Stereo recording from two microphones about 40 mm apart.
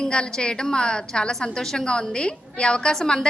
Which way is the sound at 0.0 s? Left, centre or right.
Left.